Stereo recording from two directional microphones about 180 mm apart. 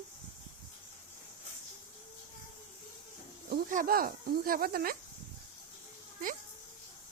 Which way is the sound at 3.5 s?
50° right (ahead or behind).